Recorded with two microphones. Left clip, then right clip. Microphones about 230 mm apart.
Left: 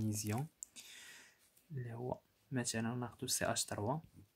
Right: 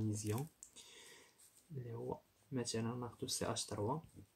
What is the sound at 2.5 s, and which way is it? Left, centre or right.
Speech, left.